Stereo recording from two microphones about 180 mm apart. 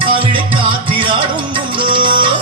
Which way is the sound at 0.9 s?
30° right (ahead or behind).